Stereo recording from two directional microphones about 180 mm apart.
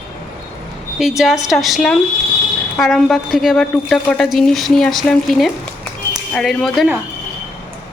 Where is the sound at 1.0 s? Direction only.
Centre (ahead or behind).